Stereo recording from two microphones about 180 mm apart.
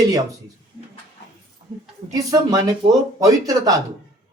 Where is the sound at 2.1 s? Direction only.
20° right (ahead or behind).